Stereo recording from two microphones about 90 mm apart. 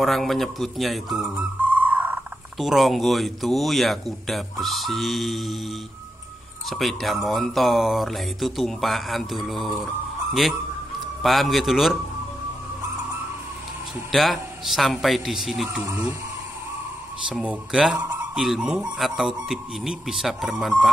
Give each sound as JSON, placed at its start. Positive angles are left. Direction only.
{"t": 0.0, "sound": "a man's voice", "side_deg": 0}
{"t": 1.6, "sound": "a sound", "side_deg": -20}
{"t": 2.6, "sound": "a man's voice", "side_deg": 0}
{"t": 6.7, "sound": "a man's voice", "side_deg": 0}
{"t": 11.2, "sound": "a man's voice", "side_deg": 0}
{"t": 14.1, "sound": "a man's voice", "side_deg": 0}
{"t": 17.3, "sound": "a man's voice", "side_deg": -10}